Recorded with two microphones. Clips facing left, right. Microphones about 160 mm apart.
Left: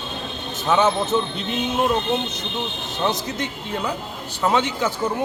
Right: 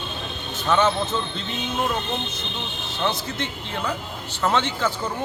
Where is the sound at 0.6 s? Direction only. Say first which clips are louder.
Left 2 dB; 20° left (ahead or behind).